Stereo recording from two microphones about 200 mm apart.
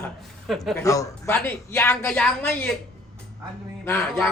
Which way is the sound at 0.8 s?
15° left (ahead or behind).